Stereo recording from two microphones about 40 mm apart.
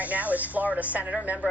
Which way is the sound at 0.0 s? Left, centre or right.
Right.